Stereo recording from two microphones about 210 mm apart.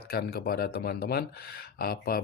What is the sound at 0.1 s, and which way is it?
Speech, 50° left (ahead or behind).